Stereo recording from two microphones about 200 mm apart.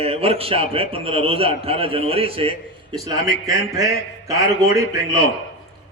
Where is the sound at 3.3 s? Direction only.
15° right (ahead or behind).